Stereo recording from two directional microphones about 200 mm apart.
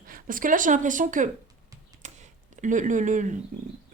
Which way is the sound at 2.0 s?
40° right (ahead or behind).